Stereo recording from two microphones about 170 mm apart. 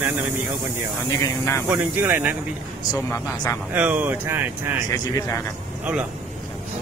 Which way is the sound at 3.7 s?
10° right (ahead or behind).